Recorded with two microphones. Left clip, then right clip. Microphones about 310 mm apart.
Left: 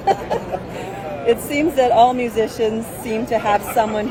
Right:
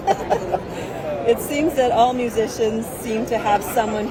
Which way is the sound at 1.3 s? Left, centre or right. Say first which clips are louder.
Left 2 dB; left.